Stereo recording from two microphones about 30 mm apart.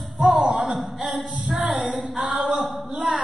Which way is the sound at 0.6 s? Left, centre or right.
Centre.